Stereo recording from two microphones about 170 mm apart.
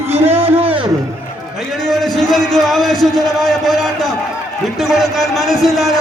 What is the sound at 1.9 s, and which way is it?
Speech, centre (ahead or behind).